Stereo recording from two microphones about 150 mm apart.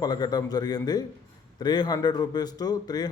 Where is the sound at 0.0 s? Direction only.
25° left (ahead or behind).